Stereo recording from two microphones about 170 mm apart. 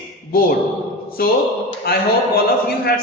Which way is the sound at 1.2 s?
60° left (ahead or behind).